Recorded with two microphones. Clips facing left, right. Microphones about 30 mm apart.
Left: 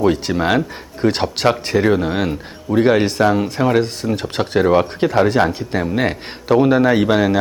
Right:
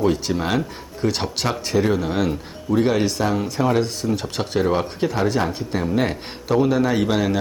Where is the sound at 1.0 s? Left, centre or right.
Left.